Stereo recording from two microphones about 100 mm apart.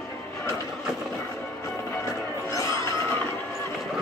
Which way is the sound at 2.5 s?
30° left (ahead or behind).